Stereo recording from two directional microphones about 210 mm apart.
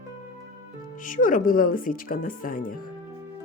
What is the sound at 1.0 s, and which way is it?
Speech, 40° left (ahead or behind).